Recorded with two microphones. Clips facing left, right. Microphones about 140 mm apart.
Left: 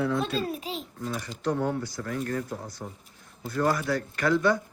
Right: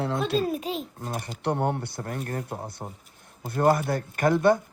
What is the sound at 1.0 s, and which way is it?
Speech, 50° right (ahead or behind).